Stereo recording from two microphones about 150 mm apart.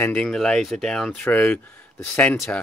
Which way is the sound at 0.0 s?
5° left (ahead or behind).